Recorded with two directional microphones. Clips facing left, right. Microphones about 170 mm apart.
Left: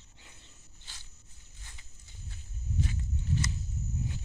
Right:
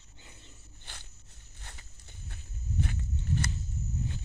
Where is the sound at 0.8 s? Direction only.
60° right (ahead or behind).